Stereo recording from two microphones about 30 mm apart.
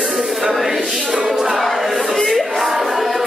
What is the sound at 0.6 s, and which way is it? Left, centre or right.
Speech, centre.